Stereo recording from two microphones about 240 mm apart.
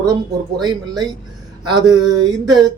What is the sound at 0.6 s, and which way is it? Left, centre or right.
Speech, centre.